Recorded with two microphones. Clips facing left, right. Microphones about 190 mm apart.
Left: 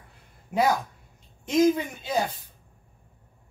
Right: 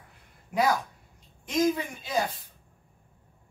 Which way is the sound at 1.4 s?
20° left (ahead or behind).